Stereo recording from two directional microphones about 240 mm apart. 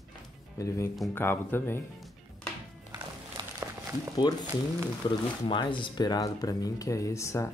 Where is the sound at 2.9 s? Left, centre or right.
Centre.